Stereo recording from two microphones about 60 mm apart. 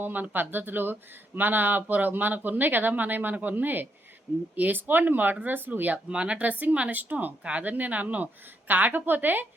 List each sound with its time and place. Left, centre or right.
0.0 s speech: right
6.1 s a woman's voice: centre